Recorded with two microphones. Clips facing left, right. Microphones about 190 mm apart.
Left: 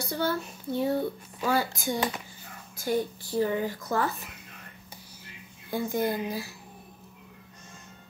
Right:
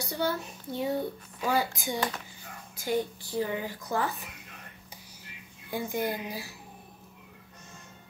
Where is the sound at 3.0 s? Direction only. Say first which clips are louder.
Left 3 dB; 15° right (ahead or behind).